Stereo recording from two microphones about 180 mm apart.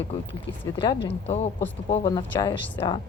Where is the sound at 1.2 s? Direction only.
35° left (ahead or behind).